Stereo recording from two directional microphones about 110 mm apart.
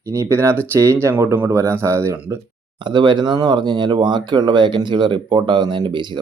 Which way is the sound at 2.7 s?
45° right (ahead or behind).